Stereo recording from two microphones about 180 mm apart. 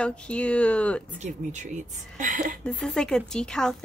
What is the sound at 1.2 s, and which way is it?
Speech, 40° right (ahead or behind).